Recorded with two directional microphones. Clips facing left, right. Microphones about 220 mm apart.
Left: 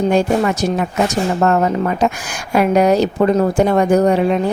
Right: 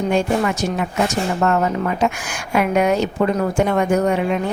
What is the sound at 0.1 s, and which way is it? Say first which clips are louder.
A woman's voice: left 3 dB; 35° left (ahead or behind).